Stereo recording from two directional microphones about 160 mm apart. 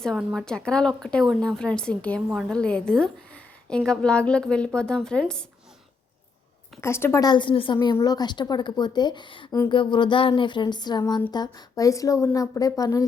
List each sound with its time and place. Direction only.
0.0 s a woman's voice: 5° left (ahead or behind)
6.8 s a woman's voice: 15° left (ahead or behind)